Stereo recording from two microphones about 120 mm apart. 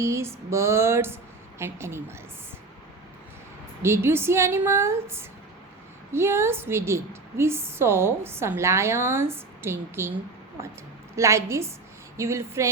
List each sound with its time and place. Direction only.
0.0 s a woman's voice: 20° right (ahead or behind)
3.8 s a woman's voice: 20° right (ahead or behind)
11.2 s a woman's voice: 25° right (ahead or behind)